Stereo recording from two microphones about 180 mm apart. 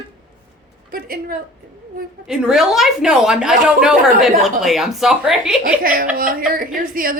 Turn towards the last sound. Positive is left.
turn(degrees=-55)  # may be behind; listen again after turning